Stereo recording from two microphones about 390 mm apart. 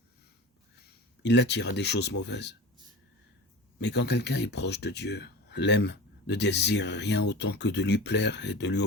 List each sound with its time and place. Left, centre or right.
1.2 s speech: left
3.8 s speech: left